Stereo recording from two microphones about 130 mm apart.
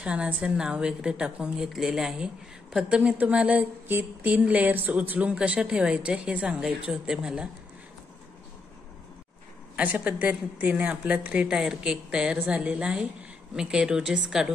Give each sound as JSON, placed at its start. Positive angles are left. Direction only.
{"t": 0.0, "sound": "a woman's voice", "side_deg": -5}
{"t": 9.8, "sound": "a woman's voice", "side_deg": -10}